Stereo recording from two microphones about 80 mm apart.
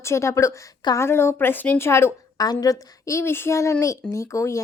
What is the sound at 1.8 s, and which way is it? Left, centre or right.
Speech, left.